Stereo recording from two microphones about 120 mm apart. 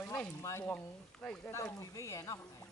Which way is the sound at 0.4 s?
20° left (ahead or behind).